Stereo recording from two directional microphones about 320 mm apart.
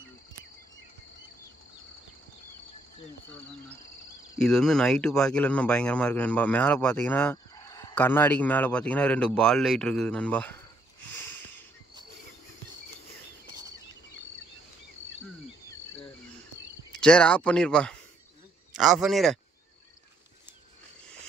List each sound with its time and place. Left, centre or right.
4.4 s speech: centre
16.9 s a man's voice: centre